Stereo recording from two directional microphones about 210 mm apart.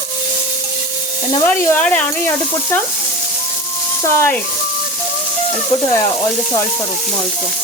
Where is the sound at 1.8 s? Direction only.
5° left (ahead or behind).